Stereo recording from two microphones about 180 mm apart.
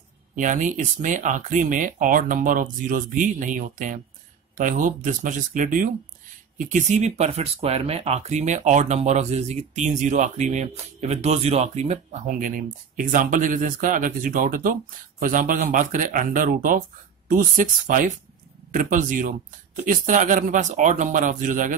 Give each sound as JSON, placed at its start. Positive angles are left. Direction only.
{"t": 0.4, "sound": "speech", "side_deg": -45}